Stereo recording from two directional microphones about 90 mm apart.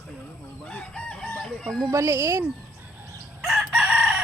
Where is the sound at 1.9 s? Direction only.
30° right (ahead or behind).